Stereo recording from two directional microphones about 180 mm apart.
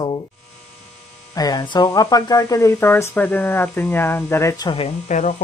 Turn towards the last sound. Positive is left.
turn(degrees=40)  # may be behind; listen again after turning